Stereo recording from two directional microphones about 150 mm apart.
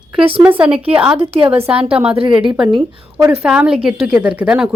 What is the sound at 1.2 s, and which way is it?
Speech, 40° right (ahead or behind).